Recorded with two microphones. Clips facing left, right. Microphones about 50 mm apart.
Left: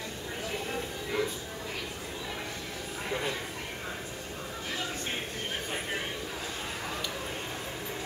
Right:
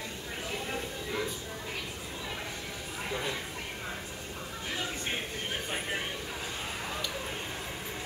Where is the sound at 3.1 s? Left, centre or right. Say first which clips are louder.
Left 2 dB; centre.